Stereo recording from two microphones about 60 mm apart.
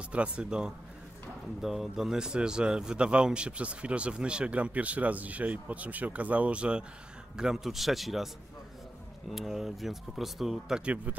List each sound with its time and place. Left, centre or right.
0.1 s a man's voice: centre
7.3 s speech: centre
9.3 s speech: centre